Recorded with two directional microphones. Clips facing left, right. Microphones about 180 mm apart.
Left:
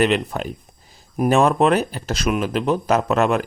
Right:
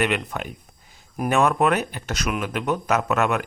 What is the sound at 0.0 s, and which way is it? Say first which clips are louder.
Speech: left 5 dB; 30° left (ahead or behind).